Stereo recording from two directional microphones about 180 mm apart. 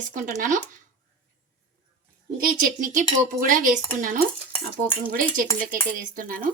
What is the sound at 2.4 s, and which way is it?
A woman's voice, 50° right (ahead or behind).